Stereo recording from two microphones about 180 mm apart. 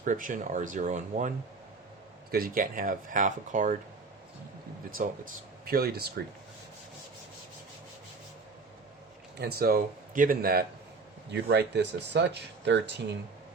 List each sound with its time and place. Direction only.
0.0 s speech: 45° right (ahead or behind)
2.3 s speech: 55° right (ahead or behind)
4.9 s speech: 50° right (ahead or behind)
9.4 s speech: 60° right (ahead or behind)
11.3 s speech: 70° right (ahead or behind)